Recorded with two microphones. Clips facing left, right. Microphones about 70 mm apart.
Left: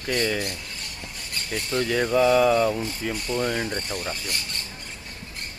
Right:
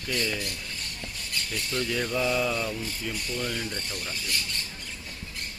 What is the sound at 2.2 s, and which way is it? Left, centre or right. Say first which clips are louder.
Speech: left 9 dB; left.